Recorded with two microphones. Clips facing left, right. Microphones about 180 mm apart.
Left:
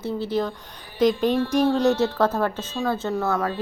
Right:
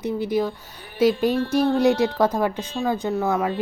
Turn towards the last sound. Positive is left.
turn(degrees=-15)  # may be behind; listen again after turning